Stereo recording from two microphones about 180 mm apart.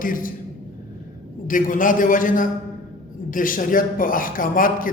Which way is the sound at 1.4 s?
50° left (ahead or behind).